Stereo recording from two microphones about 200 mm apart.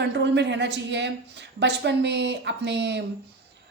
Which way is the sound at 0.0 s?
60° right (ahead or behind).